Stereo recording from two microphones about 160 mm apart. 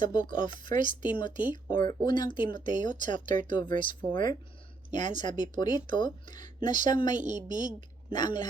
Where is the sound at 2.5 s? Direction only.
55° right (ahead or behind).